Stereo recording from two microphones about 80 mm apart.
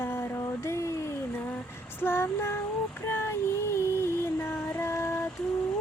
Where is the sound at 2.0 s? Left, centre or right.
Left.